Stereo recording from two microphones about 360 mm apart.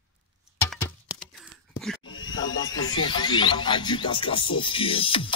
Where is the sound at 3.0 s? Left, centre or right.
Centre.